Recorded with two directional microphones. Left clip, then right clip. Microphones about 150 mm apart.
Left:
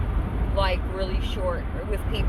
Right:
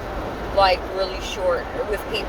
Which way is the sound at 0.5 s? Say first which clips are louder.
Right 9 dB; 25° right (ahead or behind).